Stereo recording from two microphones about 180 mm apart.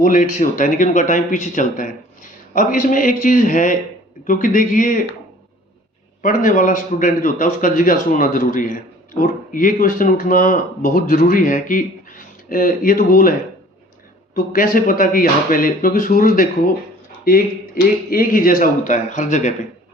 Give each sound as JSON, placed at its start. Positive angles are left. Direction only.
{"t": 0.0, "sound": "a man's voice", "side_deg": 50}
{"t": 6.2, "sound": "a man's voice", "side_deg": 45}
{"t": 14.3, "sound": "a man's voice", "side_deg": 50}
{"t": 17.8, "sound": "a man's voice", "side_deg": 50}